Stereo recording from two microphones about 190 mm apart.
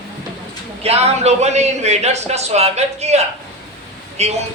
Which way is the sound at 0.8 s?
35° right (ahead or behind).